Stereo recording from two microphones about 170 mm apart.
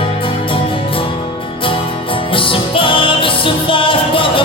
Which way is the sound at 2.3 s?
30° left (ahead or behind).